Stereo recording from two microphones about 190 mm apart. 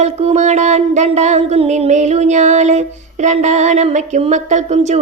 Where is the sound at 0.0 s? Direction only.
35° right (ahead or behind).